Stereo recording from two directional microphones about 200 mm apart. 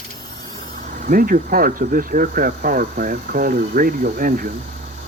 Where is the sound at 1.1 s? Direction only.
45° right (ahead or behind).